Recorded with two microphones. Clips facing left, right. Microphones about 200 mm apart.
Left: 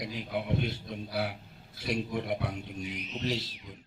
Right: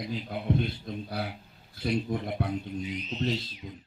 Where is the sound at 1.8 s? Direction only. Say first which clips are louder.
Right 2 dB; 50° right (ahead or behind).